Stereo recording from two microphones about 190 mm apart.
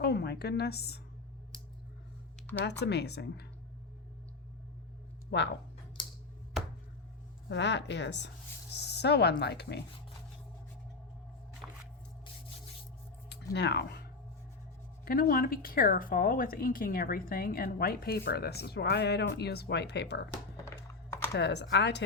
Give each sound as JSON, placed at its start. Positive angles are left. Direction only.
{"t": 0.0, "sound": "a woman's voice", "side_deg": 60}
{"t": 2.6, "sound": "a woman's voice", "side_deg": 65}
{"t": 5.3, "sound": "a woman's voice", "side_deg": 65}
{"t": 7.4, "sound": "a woman's voice", "side_deg": 70}
{"t": 8.7, "sound": "a sound", "side_deg": 60}
{"t": 9.4, "sound": "a woman's voice", "side_deg": 60}
{"t": 11.6, "sound": "a sound", "side_deg": -10}
{"t": 13.2, "sound": "a sound", "side_deg": 65}
{"t": 15.0, "sound": "a woman's voice", "side_deg": 50}
{"t": 20.7, "sound": "computer keyboard", "side_deg": 15}
{"t": 21.3, "sound": "a woman's voice", "side_deg": 65}